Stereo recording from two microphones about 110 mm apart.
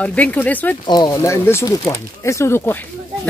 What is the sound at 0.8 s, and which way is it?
Speech, 40° left (ahead or behind).